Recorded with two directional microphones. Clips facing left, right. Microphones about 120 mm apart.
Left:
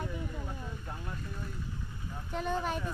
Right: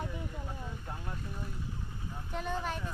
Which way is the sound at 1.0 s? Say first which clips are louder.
Even; 20° right (ahead or behind).